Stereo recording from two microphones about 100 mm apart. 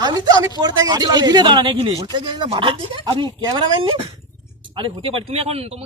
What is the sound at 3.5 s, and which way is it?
Speech, 50° right (ahead or behind).